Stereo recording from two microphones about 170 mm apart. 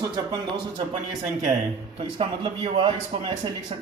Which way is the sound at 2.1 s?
30° right (ahead or behind).